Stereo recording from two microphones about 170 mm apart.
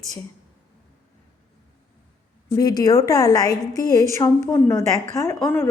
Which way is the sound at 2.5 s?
20° left (ahead or behind).